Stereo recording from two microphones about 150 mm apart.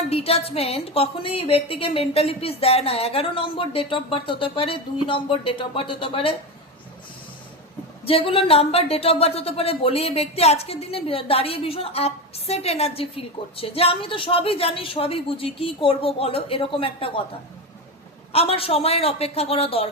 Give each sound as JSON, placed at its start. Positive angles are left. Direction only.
{"t": 0.1, "sound": "speech", "side_deg": 40}
{"t": 8.0, "sound": "speech", "side_deg": 40}
{"t": 18.3, "sound": "speech", "side_deg": 40}